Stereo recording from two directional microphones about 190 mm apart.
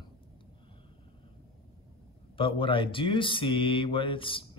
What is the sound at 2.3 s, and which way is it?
Speech, 25° left (ahead or behind).